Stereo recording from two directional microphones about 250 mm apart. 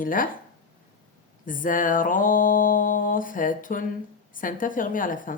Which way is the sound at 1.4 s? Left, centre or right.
Left.